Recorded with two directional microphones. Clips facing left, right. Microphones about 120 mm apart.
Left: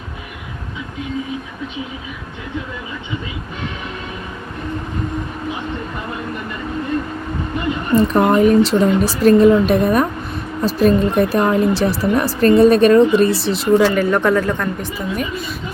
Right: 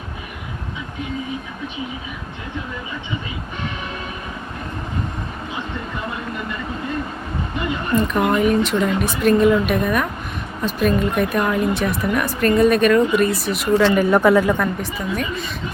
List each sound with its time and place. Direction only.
7.9 s speech: 35° left (ahead or behind)
13.9 s a woman's voice: 10° right (ahead or behind)